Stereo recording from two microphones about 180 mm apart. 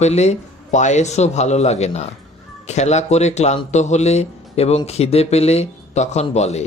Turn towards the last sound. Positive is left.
turn(degrees=40)  # may be behind; listen again after turning